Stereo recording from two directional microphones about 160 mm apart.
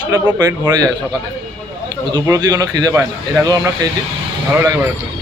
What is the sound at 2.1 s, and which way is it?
Speech, 20° right (ahead or behind).